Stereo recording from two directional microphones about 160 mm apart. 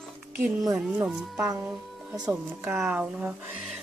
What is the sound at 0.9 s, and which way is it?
Speech, 5° right (ahead or behind).